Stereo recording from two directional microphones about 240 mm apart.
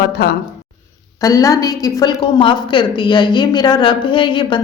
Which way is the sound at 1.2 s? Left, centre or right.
Centre.